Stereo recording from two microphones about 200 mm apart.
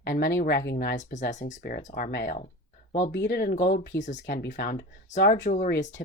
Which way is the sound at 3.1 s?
55° left (ahead or behind).